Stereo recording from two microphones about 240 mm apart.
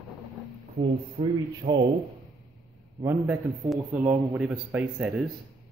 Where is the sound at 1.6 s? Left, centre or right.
Right.